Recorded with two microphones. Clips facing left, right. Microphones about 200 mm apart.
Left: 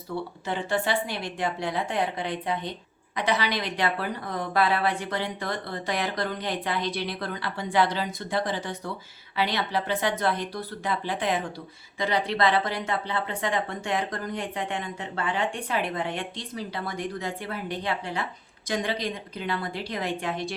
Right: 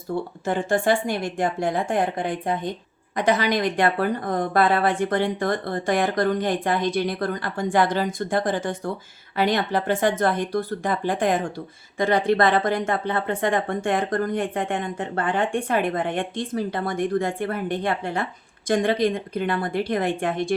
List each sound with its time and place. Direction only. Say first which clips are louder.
0.4 s speech: right 7 dB; 45° right (ahead or behind)